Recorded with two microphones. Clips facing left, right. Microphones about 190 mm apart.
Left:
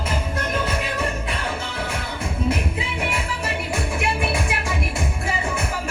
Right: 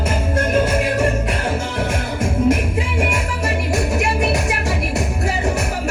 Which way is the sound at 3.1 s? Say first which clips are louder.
Right 5 dB; 45° right (ahead or behind).